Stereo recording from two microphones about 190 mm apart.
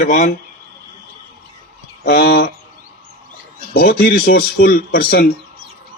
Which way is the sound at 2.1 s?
60° left (ahead or behind).